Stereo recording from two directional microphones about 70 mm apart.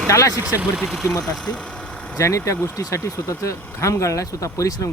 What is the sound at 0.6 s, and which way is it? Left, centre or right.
Speech, centre.